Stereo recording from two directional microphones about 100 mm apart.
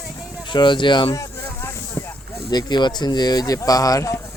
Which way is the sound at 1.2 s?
30° left (ahead or behind).